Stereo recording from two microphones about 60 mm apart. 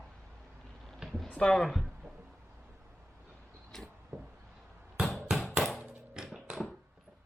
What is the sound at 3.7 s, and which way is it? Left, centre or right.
Vehicle, centre.